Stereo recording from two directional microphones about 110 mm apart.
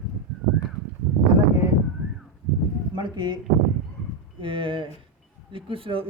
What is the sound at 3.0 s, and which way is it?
Speech, 45° right (ahead or behind).